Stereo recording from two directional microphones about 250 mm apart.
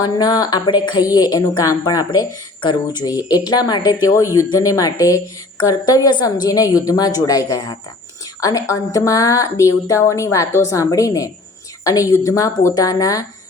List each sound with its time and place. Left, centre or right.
0.0 s a woman's voice: centre